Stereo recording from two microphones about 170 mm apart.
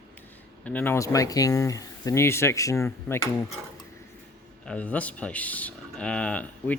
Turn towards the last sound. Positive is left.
turn(degrees=10)  # may be behind; listen again after turning